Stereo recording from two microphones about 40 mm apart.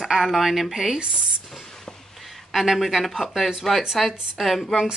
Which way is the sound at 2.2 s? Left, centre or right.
Centre.